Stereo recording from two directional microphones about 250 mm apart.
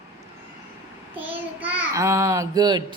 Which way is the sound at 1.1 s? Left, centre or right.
Centre.